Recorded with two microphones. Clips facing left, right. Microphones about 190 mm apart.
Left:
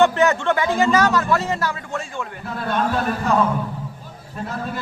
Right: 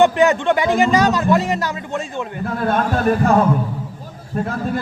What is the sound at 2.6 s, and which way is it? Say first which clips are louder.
Speech: right 4 dB; 45° right (ahead or behind).